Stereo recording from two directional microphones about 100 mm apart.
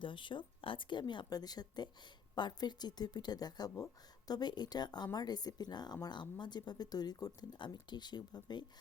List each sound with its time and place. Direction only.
0.0 s speech: 55° left (ahead or behind)